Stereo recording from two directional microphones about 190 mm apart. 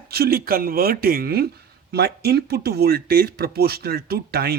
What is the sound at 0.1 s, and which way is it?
Speech, 55° right (ahead or behind).